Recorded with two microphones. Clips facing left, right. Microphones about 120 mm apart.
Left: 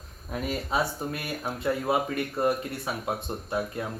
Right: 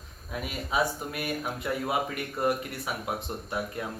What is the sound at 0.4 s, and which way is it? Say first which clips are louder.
Speech: left 1 dB; 35° left (ahead or behind).